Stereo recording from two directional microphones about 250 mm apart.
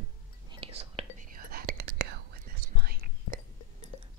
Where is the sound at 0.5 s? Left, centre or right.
Right.